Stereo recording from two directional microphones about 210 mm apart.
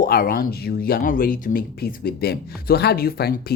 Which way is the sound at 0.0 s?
45° left (ahead or behind).